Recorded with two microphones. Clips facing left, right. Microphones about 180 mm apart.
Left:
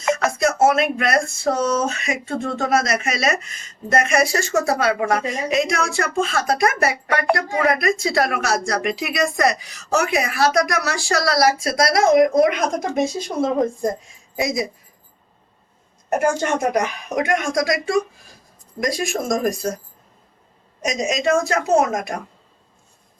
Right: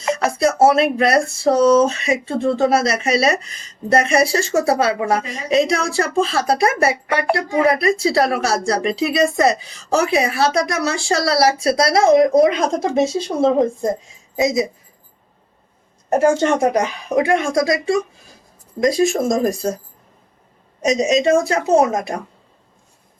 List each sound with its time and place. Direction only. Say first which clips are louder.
0.0 s speech: right 2 dB; 30° right (ahead or behind)
16.0 s speech: right 5 dB; 30° right (ahead or behind)
20.8 s speech: right 5 dB; 30° right (ahead or behind)